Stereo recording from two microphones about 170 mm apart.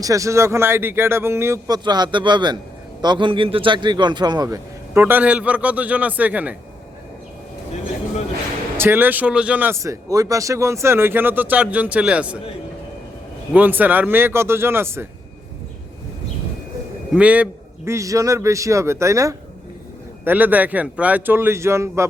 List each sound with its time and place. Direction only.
0.0 s a man's voice: 20° right (ahead or behind)
8.8 s a man's voice: 10° right (ahead or behind)
13.5 s a man's voice: 10° right (ahead or behind)
17.1 s a man's voice: 10° right (ahead or behind)